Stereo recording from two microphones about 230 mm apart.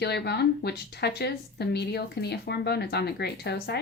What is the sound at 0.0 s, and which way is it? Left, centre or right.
A woman's voice, left.